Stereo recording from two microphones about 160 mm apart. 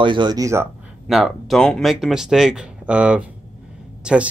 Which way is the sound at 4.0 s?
5° right (ahead or behind).